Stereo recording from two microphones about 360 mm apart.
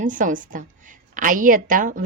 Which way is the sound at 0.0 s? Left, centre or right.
Right.